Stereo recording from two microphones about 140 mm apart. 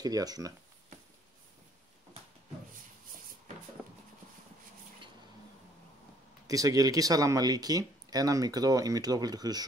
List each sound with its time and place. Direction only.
0.0 s speech: 25° right (ahead or behind)
6.4 s speech: 25° right (ahead or behind)